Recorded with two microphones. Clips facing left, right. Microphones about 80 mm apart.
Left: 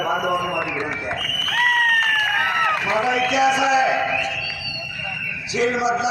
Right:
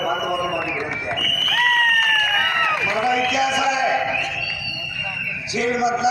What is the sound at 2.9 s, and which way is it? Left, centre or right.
Speech, left.